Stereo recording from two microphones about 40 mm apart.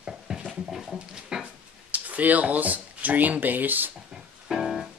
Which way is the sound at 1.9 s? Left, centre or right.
Right.